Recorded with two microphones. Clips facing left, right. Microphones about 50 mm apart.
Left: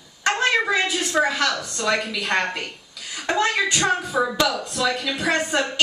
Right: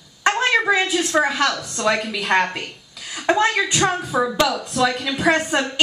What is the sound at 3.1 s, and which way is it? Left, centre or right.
A woman's voice, centre.